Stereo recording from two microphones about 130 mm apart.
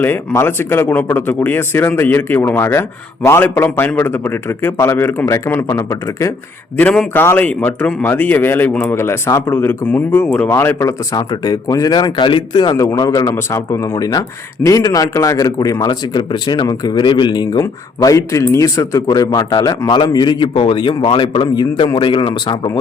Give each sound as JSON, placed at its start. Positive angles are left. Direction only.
{"t": 0.0, "sound": "speech", "side_deg": 15}
{"t": 6.7, "sound": "speech", "side_deg": 5}
{"t": 17.6, "sound": "a man's voice", "side_deg": 25}